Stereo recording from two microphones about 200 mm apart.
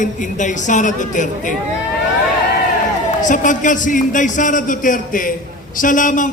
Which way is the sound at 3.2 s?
40° left (ahead or behind).